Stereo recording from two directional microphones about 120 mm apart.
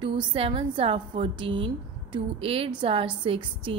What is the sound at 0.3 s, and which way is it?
A woman's voice, 50° right (ahead or behind).